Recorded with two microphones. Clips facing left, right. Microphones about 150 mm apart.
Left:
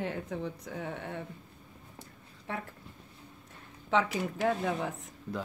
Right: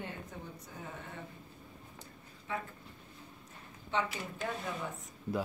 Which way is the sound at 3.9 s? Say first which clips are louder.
Left 7 dB; 90° left.